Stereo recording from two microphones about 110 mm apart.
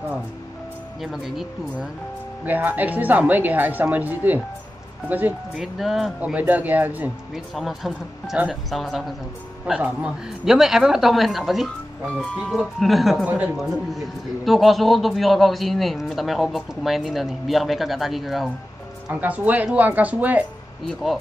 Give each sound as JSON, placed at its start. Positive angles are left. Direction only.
{"t": 1.0, "sound": "a man's voice", "side_deg": -5}
{"t": 2.4, "sound": "speech", "side_deg": -15}
{"t": 5.6, "sound": "a man's voice", "side_deg": 0}
{"t": 6.2, "sound": "speech", "side_deg": -15}
{"t": 7.3, "sound": "a man's voice", "side_deg": 0}
{"t": 13.2, "sound": "speech", "side_deg": -15}
{"t": 13.6, "sound": "a man's voice", "side_deg": 0}
{"t": 19.1, "sound": "speech", "side_deg": -15}
{"t": 20.8, "sound": "a man's voice", "side_deg": 0}